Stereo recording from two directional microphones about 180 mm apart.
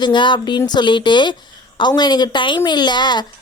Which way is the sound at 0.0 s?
25° left (ahead or behind).